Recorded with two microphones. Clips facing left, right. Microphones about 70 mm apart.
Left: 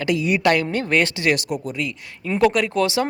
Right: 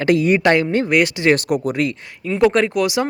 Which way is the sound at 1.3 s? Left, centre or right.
Right.